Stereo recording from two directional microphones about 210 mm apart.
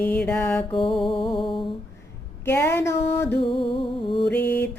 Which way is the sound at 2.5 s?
10° left (ahead or behind).